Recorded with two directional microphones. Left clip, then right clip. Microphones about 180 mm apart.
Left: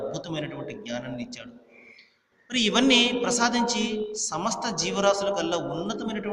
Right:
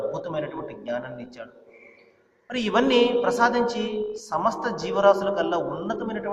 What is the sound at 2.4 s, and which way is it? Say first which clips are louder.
A woman's voice: even; 35° left (ahead or behind).